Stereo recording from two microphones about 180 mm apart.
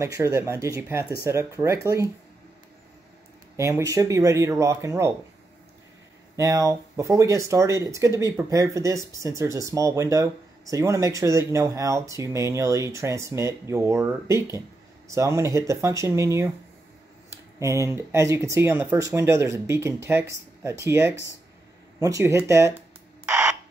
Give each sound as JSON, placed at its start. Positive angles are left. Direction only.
{"t": 0.0, "sound": "speech", "side_deg": -15}
{"t": 3.5, "sound": "speech", "side_deg": -15}
{"t": 6.3, "sound": "speech", "side_deg": -20}
{"t": 17.6, "sound": "speech", "side_deg": -15}
{"t": 23.2, "sound": "a sound", "side_deg": -5}